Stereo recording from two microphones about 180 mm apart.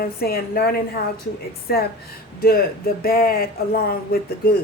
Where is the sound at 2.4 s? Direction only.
55° left (ahead or behind).